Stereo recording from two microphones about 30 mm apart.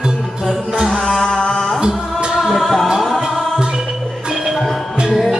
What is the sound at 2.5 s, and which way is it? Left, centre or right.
Music, centre.